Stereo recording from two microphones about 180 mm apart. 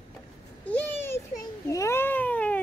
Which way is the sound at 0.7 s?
10° left (ahead or behind).